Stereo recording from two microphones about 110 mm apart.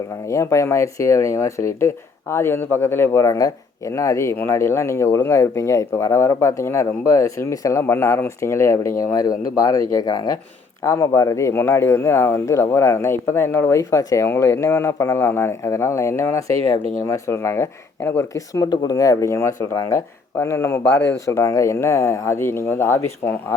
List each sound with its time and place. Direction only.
0.3 s speech: 25° left (ahead or behind)